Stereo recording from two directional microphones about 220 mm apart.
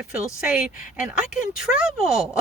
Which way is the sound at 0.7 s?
35° left (ahead or behind).